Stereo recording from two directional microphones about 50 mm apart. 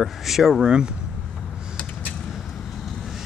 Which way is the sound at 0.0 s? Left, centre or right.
Centre.